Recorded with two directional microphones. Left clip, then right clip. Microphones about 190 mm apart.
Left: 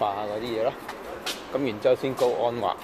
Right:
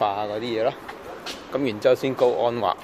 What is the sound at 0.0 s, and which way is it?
Speech, 30° right (ahead or behind).